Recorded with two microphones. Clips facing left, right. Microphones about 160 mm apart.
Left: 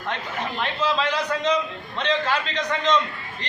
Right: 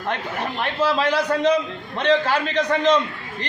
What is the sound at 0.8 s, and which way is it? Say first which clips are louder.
A man's voice: right 5 dB; 55° right (ahead or behind).